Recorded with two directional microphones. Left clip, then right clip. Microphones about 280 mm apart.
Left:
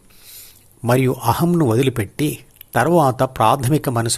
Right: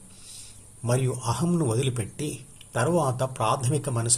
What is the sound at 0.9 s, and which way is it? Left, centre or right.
Speech, left.